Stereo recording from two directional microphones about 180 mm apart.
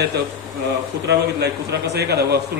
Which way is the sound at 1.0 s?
70° right (ahead or behind).